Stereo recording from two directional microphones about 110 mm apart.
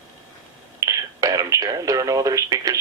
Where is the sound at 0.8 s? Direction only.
30° right (ahead or behind).